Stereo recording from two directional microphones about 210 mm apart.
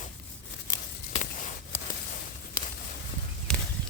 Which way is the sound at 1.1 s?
35° left (ahead or behind).